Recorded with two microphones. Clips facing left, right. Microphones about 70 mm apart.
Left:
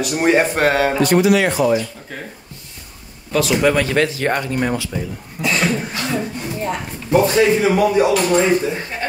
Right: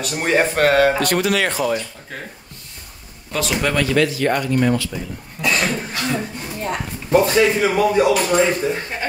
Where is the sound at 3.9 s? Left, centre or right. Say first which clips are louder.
Even; left.